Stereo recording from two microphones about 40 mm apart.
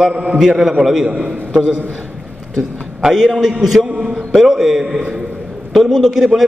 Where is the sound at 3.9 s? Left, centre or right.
Right.